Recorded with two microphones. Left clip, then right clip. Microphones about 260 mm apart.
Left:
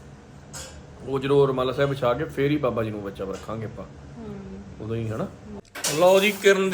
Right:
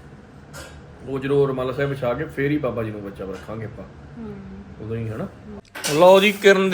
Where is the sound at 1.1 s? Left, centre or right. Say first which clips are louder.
Even; centre.